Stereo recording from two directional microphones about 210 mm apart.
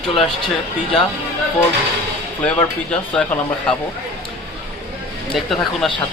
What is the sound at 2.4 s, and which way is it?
Speech, 5° left (ahead or behind).